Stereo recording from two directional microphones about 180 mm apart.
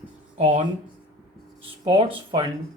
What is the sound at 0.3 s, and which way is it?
Speech, 35° right (ahead or behind).